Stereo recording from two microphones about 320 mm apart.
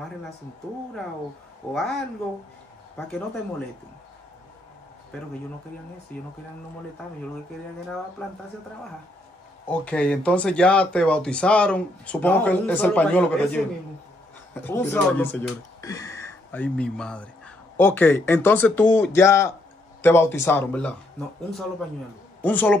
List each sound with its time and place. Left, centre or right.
1.6 s speech: centre
6.1 s speech: centre
9.7 s speech: centre